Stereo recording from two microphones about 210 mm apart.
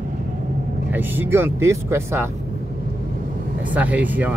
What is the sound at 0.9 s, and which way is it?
Speech, 10° right (ahead or behind).